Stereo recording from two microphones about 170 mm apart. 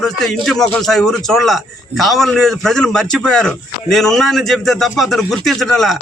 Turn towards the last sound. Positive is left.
turn(degrees=0)  # may be behind; listen again after turning